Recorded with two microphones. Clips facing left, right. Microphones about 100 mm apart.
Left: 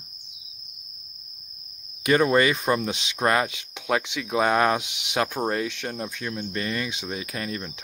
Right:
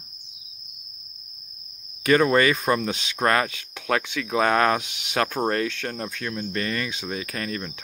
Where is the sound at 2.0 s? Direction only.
15° left (ahead or behind).